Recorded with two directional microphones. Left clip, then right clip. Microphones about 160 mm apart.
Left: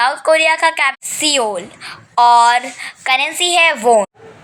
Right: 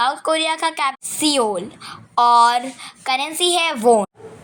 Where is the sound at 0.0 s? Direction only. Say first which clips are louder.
Left 6 dB; 50° right (ahead or behind).